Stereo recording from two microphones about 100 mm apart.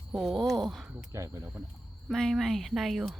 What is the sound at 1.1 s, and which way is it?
Speech, 30° right (ahead or behind).